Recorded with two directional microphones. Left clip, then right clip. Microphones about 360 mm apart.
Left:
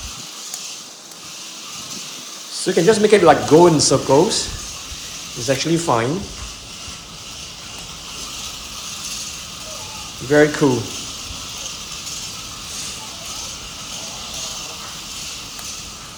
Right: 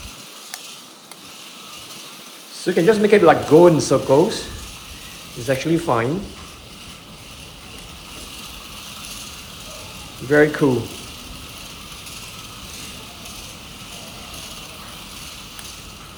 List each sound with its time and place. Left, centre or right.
2.6 s speech: centre
5.5 s speech: centre
10.2 s speech: centre